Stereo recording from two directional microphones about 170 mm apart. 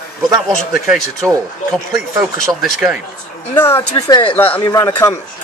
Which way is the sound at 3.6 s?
15° left (ahead or behind).